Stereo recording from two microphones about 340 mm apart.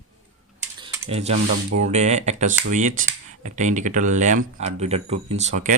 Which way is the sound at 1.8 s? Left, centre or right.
Centre.